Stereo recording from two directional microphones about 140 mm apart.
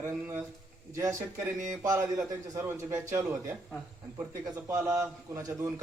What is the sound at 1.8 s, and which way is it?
A man's voice, 20° right (ahead or behind).